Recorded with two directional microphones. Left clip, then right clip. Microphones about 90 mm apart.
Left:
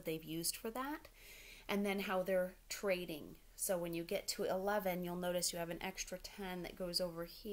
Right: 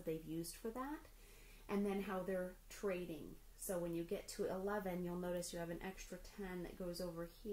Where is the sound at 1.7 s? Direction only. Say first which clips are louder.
Left 4 dB; 20° left (ahead or behind).